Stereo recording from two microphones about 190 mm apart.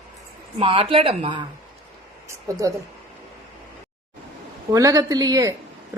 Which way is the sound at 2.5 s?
15° right (ahead or behind).